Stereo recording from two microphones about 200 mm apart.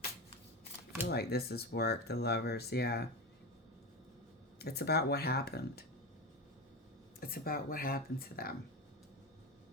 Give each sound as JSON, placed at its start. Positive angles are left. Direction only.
{"t": 1.0, "sound": "speech", "side_deg": 50}
{"t": 4.6, "sound": "speech", "side_deg": 55}
{"t": 7.2, "sound": "speech", "side_deg": 50}